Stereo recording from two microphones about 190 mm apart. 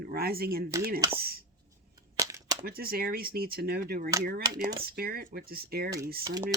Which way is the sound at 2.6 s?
55° right (ahead or behind).